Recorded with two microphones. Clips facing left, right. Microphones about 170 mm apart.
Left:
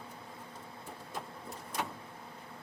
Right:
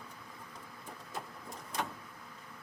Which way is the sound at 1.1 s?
5° left (ahead or behind).